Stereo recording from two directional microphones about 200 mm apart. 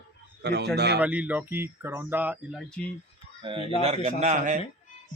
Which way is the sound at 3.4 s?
25° right (ahead or behind).